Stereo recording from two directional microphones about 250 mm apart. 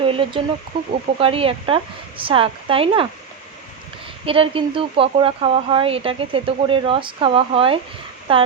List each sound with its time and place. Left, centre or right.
0.0 s speech: right
4.3 s speech: right